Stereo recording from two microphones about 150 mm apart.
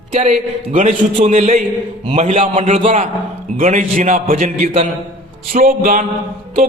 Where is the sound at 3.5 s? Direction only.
60° right (ahead or behind).